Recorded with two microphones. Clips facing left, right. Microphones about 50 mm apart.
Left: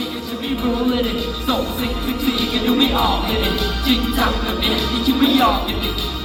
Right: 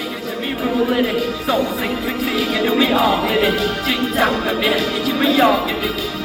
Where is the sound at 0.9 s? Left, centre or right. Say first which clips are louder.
Right 3 dB; right.